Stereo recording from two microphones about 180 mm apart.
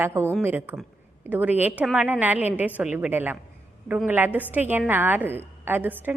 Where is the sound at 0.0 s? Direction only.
15° right (ahead or behind).